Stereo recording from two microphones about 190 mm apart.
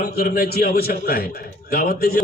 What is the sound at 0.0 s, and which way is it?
A man's voice, 50° left (ahead or behind).